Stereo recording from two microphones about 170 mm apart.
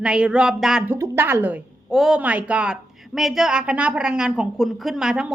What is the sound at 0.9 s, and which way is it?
A woman's voice, 15° right (ahead or behind).